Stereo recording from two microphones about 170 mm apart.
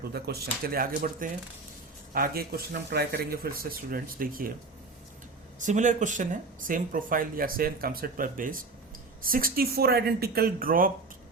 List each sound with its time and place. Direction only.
0.1 s speech: 70° right (ahead or behind)
5.5 s speech: 45° right (ahead or behind)